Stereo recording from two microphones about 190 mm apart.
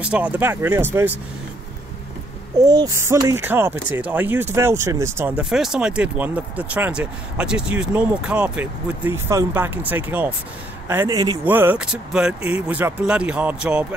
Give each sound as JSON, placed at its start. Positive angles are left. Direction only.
{"t": 0.0, "sound": "speech", "side_deg": -5}
{"t": 2.6, "sound": "speech", "side_deg": -20}